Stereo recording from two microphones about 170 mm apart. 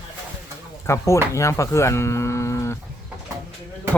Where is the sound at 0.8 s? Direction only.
15° left (ahead or behind).